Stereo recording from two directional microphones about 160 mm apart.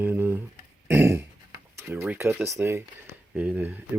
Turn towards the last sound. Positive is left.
turn(degrees=-10)  # may be behind; listen again after turning